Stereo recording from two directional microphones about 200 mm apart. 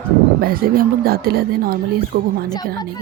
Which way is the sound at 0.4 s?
45° right (ahead or behind).